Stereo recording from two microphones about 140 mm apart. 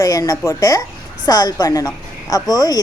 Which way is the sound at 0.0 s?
25° left (ahead or behind).